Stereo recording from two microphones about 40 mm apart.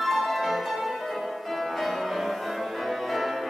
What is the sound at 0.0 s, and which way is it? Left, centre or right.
Music, centre.